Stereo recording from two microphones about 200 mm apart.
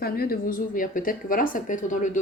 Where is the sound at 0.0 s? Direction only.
50° left (ahead or behind).